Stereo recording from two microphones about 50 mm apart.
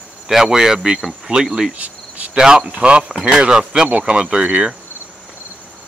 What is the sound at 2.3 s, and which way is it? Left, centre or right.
Speech, centre.